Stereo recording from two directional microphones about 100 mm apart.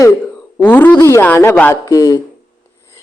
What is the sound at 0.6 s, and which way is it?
Speech, 20° left (ahead or behind).